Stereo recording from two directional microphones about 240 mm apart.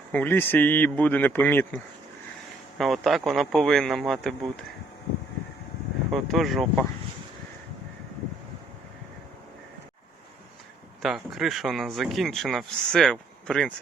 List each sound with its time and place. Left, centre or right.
0.1 s speech: centre
6.1 s speech: centre
11.0 s speech: centre